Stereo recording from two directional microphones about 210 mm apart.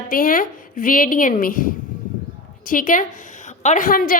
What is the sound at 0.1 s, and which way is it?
A woman's voice, 40° left (ahead or behind).